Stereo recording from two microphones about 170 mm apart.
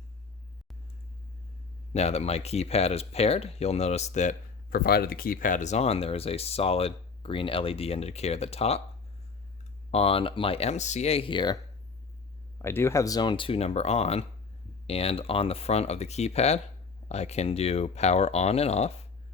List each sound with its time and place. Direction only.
1.9 s speech: 40° left (ahead or behind)
4.7 s speech: 65° left (ahead or behind); by 8.8 s 35° left (ahead or behind)
9.9 s speech: 35° left (ahead or behind)
12.6 s speech: 15° left (ahead or behind); by 18.9 s 40° left (ahead or behind)